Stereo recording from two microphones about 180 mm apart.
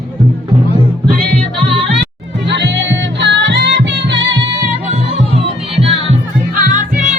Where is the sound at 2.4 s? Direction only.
75° right (ahead or behind).